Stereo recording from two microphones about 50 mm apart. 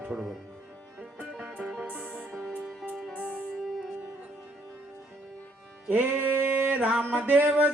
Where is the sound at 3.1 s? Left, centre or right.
Left.